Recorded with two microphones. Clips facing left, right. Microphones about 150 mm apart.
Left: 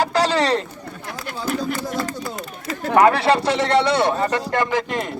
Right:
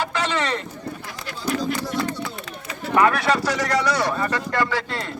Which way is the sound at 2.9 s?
35° left (ahead or behind).